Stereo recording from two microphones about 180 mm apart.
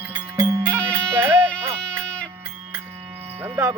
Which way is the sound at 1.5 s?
5° left (ahead or behind).